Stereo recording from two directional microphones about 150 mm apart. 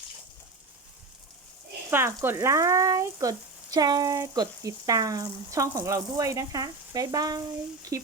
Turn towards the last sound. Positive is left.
turn(degrees=-25)  # may be behind; listen again after turning